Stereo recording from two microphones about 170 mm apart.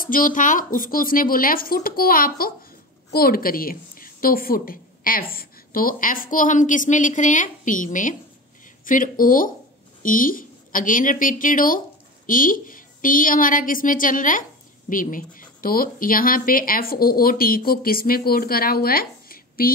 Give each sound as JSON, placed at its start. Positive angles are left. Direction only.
{"t": 0.0, "sound": "a woman's voice", "side_deg": 55}